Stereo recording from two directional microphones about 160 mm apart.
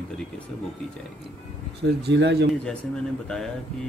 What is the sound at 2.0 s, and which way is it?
Speech, 90° right.